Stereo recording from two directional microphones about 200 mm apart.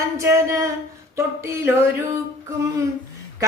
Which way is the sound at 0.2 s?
15° right (ahead or behind).